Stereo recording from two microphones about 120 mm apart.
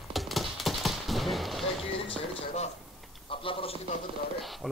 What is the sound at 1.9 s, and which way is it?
A man's voice, 50° left (ahead or behind).